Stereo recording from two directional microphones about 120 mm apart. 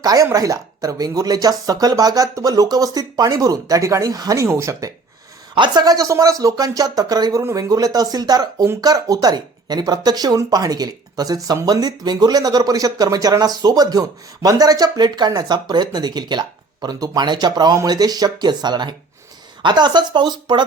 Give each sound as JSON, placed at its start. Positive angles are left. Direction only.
{"t": 0.0, "sound": "speech", "side_deg": -30}
{"t": 5.5, "sound": "speech", "side_deg": -40}